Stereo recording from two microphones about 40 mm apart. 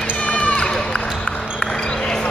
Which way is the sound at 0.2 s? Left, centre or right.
Left.